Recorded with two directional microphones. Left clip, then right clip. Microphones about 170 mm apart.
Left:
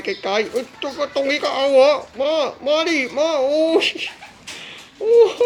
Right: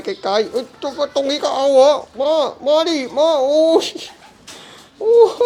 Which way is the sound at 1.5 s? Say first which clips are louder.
Right 2 dB; 15° right (ahead or behind).